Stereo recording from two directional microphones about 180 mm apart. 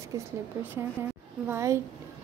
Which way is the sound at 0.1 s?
20° right (ahead or behind).